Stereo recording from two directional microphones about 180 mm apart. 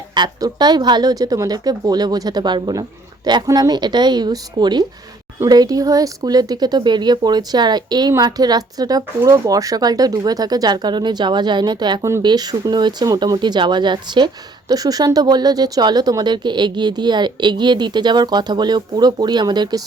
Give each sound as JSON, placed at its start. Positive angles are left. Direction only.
{"t": 0.1, "sound": "speech", "side_deg": -20}